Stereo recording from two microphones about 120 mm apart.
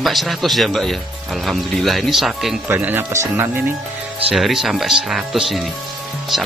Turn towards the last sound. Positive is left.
turn(degrees=0)  # may be behind; listen again after turning